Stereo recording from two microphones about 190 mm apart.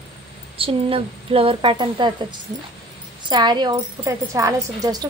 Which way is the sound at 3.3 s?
25° right (ahead or behind).